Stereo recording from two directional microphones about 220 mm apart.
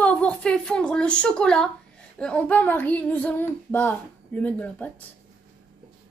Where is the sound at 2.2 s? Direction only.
5° left (ahead or behind).